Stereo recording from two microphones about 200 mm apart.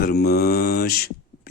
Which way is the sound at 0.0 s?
50° left (ahead or behind).